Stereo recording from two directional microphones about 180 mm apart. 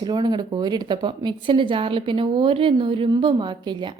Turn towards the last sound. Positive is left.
turn(degrees=-25)  # may be behind; listen again after turning